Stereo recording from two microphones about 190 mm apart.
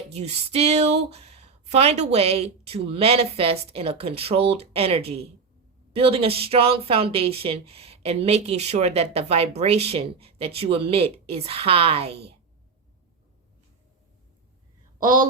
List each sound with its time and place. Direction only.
0.1 s speech: 35° right (ahead or behind)
14.9 s speech: 45° right (ahead or behind)